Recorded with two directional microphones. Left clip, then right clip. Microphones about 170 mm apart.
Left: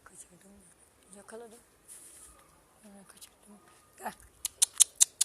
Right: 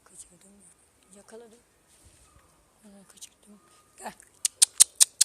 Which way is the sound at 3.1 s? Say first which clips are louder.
Right 4 dB; 25° right (ahead or behind).